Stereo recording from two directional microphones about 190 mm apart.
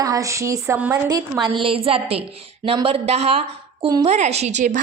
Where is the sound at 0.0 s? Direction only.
20° right (ahead or behind).